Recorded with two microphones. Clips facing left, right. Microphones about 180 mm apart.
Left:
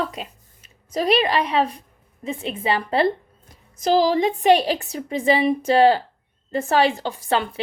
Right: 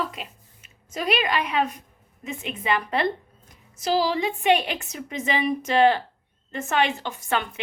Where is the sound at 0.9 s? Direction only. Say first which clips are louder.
Left 5 dB; 35° left (ahead or behind).